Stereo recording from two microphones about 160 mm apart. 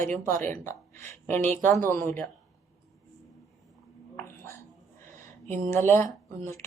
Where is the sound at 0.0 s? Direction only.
50° right (ahead or behind).